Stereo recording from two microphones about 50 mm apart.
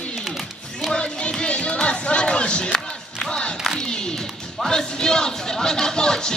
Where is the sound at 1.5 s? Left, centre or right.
Left.